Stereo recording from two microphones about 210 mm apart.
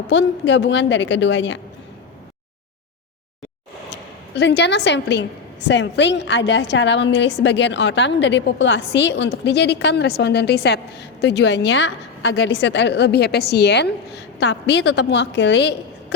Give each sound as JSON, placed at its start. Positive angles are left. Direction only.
{"t": 0.1, "sound": "a woman's voice", "side_deg": 60}
{"t": 4.4, "sound": "a woman's voice", "side_deg": 55}